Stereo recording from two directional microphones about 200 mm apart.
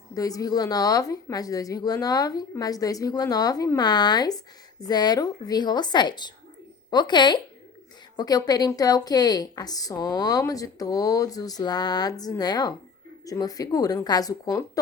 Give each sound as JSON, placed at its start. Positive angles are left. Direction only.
{"t": 0.1, "sound": "a woman's voice", "side_deg": 15}